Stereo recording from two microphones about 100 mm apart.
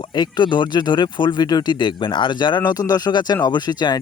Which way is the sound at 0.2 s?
50° left (ahead or behind).